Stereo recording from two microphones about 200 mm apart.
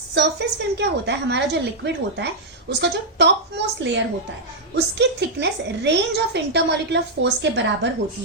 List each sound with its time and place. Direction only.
0.1 s a woman's voice: 60° right (ahead or behind)